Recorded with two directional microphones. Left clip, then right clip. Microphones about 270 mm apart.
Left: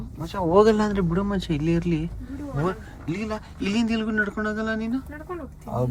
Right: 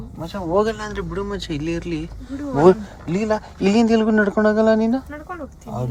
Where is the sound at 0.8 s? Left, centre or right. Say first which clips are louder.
Left 2 dB; centre.